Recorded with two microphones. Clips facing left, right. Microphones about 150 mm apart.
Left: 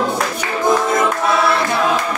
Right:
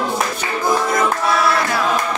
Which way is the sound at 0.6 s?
25° left (ahead or behind).